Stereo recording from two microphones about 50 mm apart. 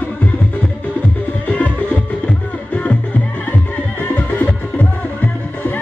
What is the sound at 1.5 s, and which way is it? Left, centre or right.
Music, left.